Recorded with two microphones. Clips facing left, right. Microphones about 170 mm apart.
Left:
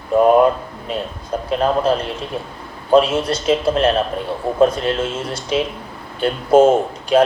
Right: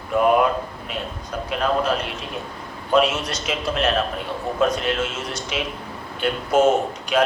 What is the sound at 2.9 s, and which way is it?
A man's voice, 30° left (ahead or behind).